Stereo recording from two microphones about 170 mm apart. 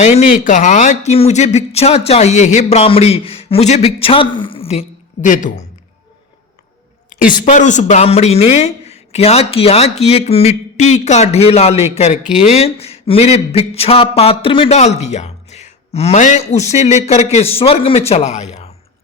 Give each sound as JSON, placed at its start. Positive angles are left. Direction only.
{"t": 0.0, "sound": "speech", "side_deg": 40}
{"t": 7.4, "sound": "speech", "side_deg": 45}